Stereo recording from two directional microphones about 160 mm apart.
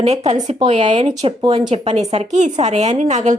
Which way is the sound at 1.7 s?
40° right (ahead or behind).